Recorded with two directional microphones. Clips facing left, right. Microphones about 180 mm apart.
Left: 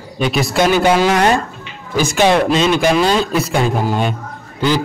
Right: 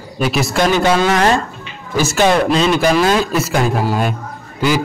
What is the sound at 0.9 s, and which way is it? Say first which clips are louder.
Speech: left 1 dB; 10° left (ahead or behind).